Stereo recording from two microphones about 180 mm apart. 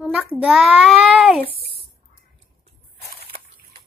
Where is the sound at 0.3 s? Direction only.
5° right (ahead or behind).